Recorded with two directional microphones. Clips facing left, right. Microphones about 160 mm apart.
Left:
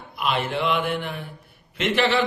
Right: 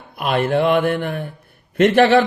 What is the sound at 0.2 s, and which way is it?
A man's voice, 55° right (ahead or behind).